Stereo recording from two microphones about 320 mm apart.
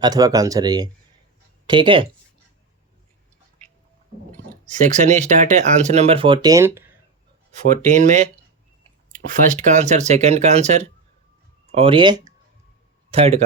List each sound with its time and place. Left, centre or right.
0.0 s speech: centre
4.7 s speech: right; by 6.9 s centre
7.9 s speech: right
9.3 s a man's voice: right